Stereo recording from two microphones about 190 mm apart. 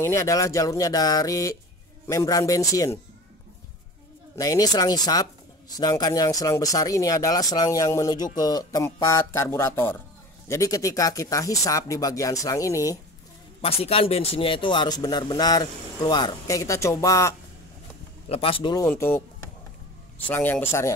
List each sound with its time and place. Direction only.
0.0 s speech: 15° left (ahead or behind)
4.4 s speech: 20° left (ahead or behind)
13.6 s speech: 30° left (ahead or behind); by 17.4 s 15° left (ahead or behind)
18.3 s speech: 30° left (ahead or behind)
18.9 s speech: 10° left (ahead or behind)